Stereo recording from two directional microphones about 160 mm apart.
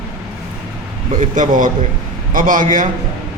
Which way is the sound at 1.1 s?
55° right (ahead or behind).